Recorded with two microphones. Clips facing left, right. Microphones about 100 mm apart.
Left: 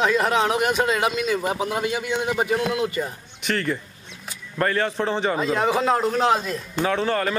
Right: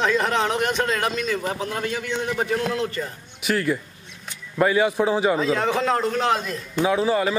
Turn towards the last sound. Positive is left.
turn(degrees=-5)  # may be behind; listen again after turning